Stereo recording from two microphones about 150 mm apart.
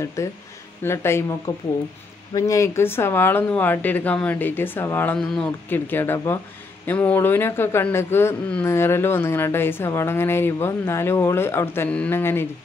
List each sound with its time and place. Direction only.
0.0 s speech: 20° left (ahead or behind)